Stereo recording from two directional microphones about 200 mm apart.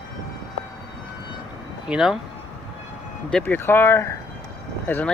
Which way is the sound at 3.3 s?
10° left (ahead or behind).